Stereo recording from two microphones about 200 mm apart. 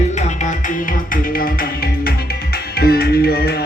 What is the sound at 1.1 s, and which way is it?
Music, 45° left (ahead or behind).